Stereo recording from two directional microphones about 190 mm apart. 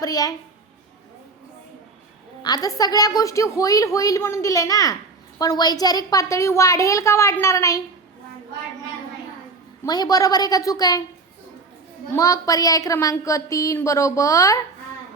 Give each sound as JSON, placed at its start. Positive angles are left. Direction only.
{"t": 0.0, "sound": "a woman's voice", "side_deg": 20}
{"t": 2.4, "sound": "a woman's voice", "side_deg": 20}
{"t": 9.8, "sound": "a woman's voice", "side_deg": 20}
{"t": 12.1, "sound": "a woman's voice", "side_deg": 20}